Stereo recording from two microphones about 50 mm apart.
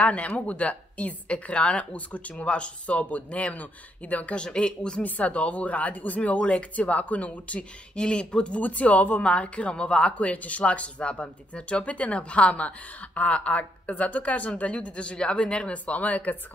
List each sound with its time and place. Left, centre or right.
0.0 s speech: left
4.5 s speech: centre
8.5 s speech: left